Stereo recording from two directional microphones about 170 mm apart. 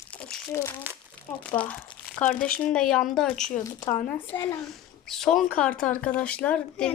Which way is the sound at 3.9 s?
45° left (ahead or behind).